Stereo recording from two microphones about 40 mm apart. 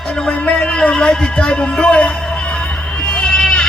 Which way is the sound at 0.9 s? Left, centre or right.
Centre.